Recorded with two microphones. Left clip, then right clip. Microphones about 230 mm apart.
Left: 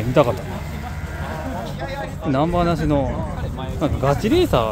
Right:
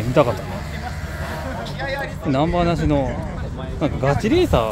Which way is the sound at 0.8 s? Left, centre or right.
Right.